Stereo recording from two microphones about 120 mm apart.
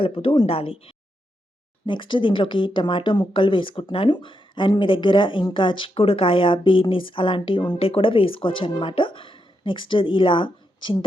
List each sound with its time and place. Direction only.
0.0 s speech: 45° left (ahead or behind)